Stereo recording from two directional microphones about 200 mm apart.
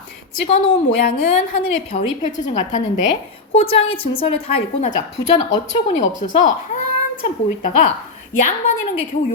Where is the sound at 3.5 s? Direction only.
25° left (ahead or behind).